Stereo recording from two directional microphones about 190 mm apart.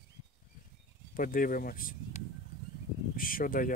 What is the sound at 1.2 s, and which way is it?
Speech, 45° left (ahead or behind).